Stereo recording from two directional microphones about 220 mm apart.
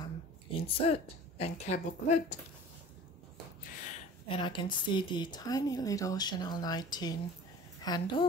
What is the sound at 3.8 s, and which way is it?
A woman's voice, 25° left (ahead or behind).